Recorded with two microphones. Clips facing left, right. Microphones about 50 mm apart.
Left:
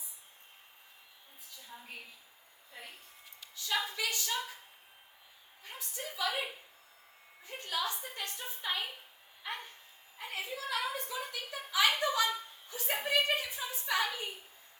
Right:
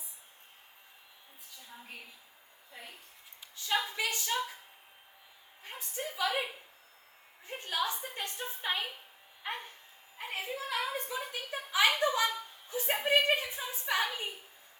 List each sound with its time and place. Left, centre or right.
3.5 s a woman's voice: right
5.6 s a woman's voice: right
10.2 s a woman's voice: right